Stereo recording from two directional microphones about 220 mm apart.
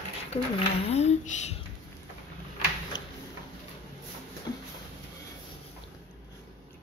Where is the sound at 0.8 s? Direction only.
30° left (ahead or behind).